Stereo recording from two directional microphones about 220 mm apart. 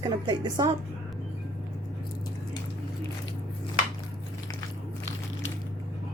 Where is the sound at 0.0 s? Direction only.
20° right (ahead or behind).